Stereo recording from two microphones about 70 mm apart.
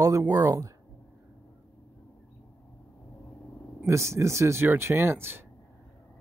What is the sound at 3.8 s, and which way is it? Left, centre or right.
Speech, right.